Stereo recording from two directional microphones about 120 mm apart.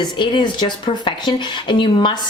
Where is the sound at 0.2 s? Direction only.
40° left (ahead or behind).